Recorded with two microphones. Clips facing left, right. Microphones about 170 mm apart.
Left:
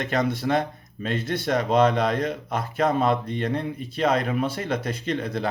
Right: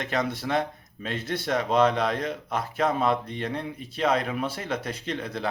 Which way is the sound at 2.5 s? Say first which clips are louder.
Left 2 dB; 50° left (ahead or behind).